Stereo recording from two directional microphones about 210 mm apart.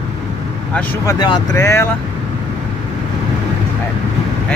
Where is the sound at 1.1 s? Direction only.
20° left (ahead or behind).